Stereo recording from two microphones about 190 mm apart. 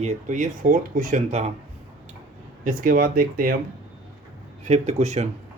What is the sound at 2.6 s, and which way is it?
Speech, 45° right (ahead or behind).